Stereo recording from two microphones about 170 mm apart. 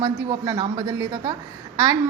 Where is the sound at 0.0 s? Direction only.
20° right (ahead or behind).